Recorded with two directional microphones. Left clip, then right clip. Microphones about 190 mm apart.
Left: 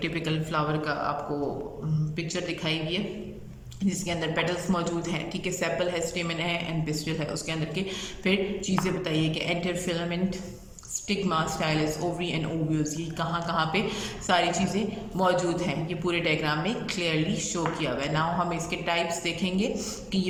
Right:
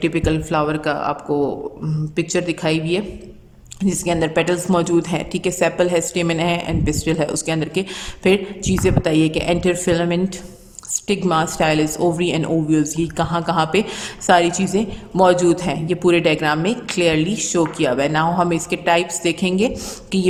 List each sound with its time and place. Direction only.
0.0 s speech: 40° right (ahead or behind)
2.1 s a woman's voice: 40° right (ahead or behind)